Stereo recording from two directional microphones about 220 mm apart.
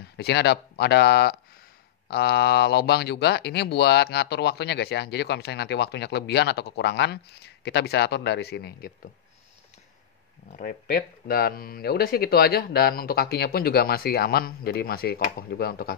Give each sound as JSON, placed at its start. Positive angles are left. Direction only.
{"t": 0.2, "sound": "speech", "side_deg": 50}
{"t": 10.5, "sound": "speech", "side_deg": 40}